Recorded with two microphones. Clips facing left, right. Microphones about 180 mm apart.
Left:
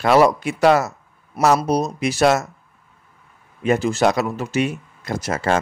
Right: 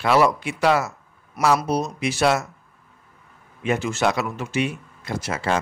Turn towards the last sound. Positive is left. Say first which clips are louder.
# left 4 dB
turn(degrees=45)  # may be behind; listen again after turning